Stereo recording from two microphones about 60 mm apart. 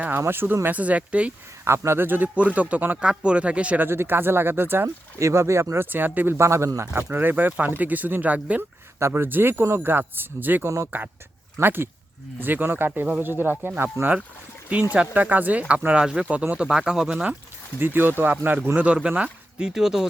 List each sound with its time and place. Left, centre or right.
0.3 s speech: right
0.6 s speech: right
1.6 s speech: right
2.0 s speech: right
3.8 s speech: right
5.2 s speech: right
7.1 s speech: right
9.0 s speech: right
14.9 s speech: right
16.2 s speech: right
16.6 s speech: centre
17.7 s speech: right
19.1 s speech: right
19.6 s speech: centre